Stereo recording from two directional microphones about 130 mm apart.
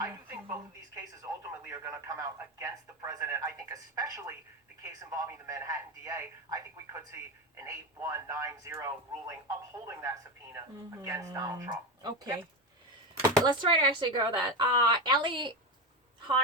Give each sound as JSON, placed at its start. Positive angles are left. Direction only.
{"t": 0.0, "sound": "a sound", "side_deg": -15}
{"t": 1.7, "sound": "speech", "side_deg": -25}
{"t": 13.4, "sound": "speech", "side_deg": -40}